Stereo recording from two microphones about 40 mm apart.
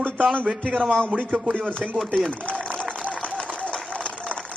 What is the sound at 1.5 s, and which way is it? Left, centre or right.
Chopping, left.